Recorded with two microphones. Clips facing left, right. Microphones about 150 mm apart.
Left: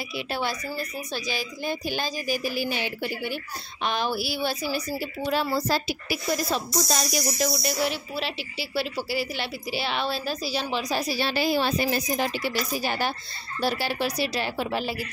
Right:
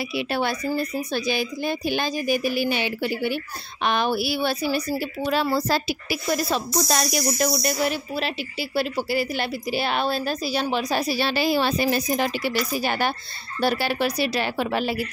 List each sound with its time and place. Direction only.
0.2 s a woman's voice: 60° right (ahead or behind)
7.4 s a woman's voice: 50° right (ahead or behind)